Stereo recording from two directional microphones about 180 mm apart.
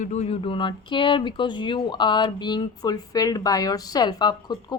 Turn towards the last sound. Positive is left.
turn(degrees=25)  # may be behind; listen again after turning